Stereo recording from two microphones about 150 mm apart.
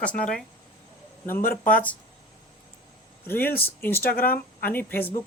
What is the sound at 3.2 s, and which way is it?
Speech, 15° left (ahead or behind).